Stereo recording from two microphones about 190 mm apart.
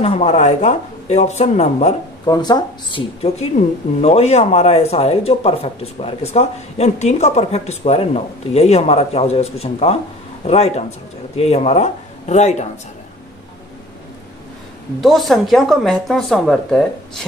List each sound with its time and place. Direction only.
0.0 s speech: 30° left (ahead or behind)
2.2 s speech: 20° left (ahead or behind); by 12.6 s 35° left (ahead or behind)
15.0 s a woman's voice: centre (ahead or behind)